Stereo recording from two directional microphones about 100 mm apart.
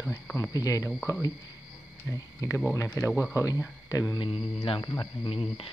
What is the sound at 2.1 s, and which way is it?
Speech, 30° left (ahead or behind).